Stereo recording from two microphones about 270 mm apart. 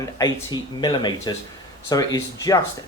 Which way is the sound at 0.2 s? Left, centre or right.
Centre.